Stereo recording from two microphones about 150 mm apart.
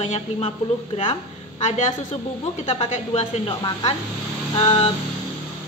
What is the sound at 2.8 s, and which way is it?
Speech, 40° left (ahead or behind).